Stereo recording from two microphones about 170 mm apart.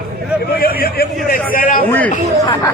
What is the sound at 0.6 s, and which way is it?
A man's voice, 60° left (ahead or behind).